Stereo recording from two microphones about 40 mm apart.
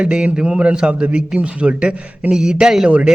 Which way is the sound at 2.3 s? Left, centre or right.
Centre.